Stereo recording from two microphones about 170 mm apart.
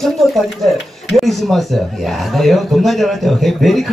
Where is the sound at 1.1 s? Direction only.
Centre (ahead or behind).